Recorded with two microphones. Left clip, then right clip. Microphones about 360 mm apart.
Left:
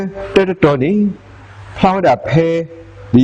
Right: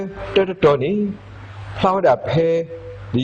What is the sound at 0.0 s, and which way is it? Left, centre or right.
Speech, left.